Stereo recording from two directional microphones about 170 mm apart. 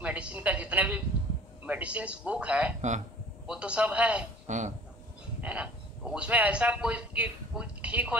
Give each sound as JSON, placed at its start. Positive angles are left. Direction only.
{"t": 0.0, "sound": "a woman's voice", "side_deg": -5}
{"t": 4.5, "sound": "speech", "side_deg": -45}
{"t": 5.4, "sound": "speech", "side_deg": -10}